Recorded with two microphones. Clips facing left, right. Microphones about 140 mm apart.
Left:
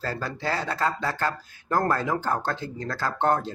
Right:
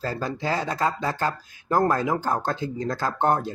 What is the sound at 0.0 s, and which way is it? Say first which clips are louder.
Speech: right 2 dB; 15° right (ahead or behind).